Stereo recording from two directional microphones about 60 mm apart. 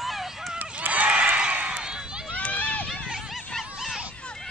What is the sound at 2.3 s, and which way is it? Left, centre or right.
Run, left.